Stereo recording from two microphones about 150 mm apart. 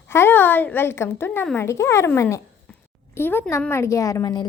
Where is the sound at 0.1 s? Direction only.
15° left (ahead or behind).